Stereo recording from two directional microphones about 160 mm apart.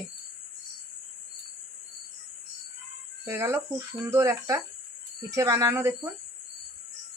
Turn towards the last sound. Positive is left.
turn(degrees=-15)  # may be behind; listen again after turning